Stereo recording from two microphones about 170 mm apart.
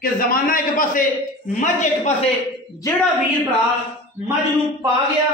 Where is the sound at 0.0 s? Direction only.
55° left (ahead or behind).